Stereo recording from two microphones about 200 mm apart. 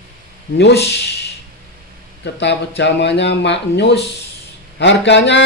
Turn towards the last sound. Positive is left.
turn(degrees=60)  # may be behind; listen again after turning